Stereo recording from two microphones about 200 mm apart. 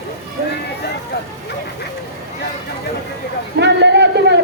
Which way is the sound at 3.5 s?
60° right (ahead or behind).